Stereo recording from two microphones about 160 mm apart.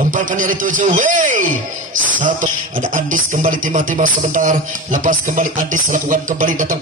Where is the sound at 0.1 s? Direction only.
55° right (ahead or behind).